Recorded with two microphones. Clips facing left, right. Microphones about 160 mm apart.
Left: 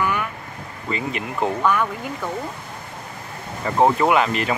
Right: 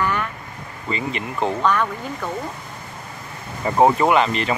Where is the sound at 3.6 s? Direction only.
15° right (ahead or behind).